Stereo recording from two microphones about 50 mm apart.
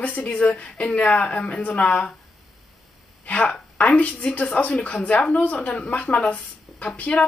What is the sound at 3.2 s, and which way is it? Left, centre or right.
A woman's voice, left.